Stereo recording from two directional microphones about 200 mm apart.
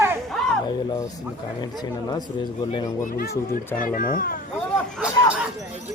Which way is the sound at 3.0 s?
45° left (ahead or behind).